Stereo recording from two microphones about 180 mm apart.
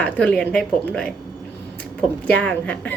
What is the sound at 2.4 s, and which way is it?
Speech, 10° left (ahead or behind).